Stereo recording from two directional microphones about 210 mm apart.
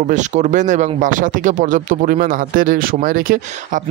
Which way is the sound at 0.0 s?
35° right (ahead or behind).